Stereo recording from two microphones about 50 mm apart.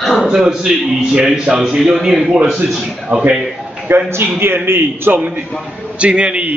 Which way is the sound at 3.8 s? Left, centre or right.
Right.